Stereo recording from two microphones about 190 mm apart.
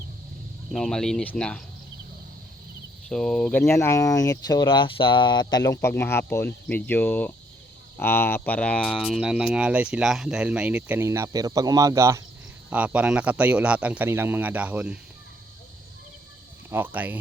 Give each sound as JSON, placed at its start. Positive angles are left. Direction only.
{"t": 0.7, "sound": "speech", "side_deg": 0}
{"t": 3.1, "sound": "speech", "side_deg": 5}
{"t": 3.6, "sound": "speech", "side_deg": 15}
{"t": 16.6, "sound": "speech", "side_deg": -10}